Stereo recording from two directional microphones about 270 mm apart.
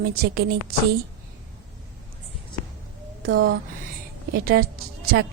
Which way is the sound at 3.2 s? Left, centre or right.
Right.